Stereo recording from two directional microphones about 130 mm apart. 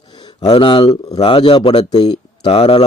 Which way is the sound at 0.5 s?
45° left (ahead or behind).